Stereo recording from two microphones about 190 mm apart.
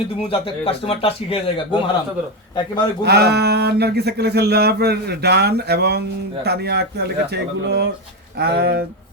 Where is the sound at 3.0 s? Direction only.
60° right (ahead or behind).